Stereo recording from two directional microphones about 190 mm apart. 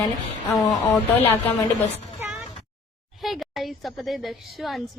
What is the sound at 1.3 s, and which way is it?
Speech, 10° left (ahead or behind).